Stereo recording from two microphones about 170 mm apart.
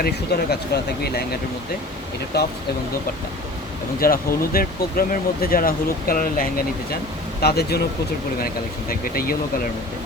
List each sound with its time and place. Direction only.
0.3 s a man's voice: 75° left (ahead or behind)
2.3 s a man's voice: 75° left (ahead or behind)
4.0 s speech: 60° left (ahead or behind)
7.4 s a man's voice: 70° left (ahead or behind)
8.9 s speech: 60° left (ahead or behind)